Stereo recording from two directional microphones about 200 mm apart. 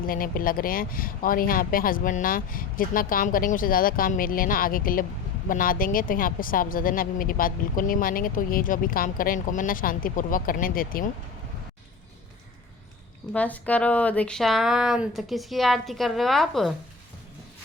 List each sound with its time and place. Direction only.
0.0 s a woman's voice: 45° left (ahead or behind)
13.3 s speech: 5° left (ahead or behind)